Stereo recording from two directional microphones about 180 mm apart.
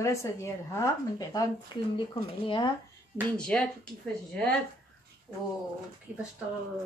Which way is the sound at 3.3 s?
5° left (ahead or behind).